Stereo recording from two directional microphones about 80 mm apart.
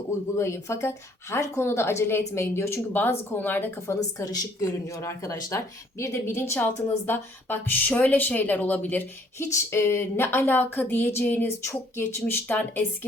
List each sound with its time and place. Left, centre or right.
0.3 s a woman's voice: left
4.3 s speech: left; by 9.0 s centre
9.4 s speech: left